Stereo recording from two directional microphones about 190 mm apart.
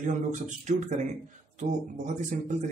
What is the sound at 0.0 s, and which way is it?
Speech, 40° right (ahead or behind).